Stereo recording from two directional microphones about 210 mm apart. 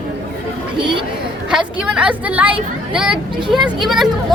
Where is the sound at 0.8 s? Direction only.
25° right (ahead or behind).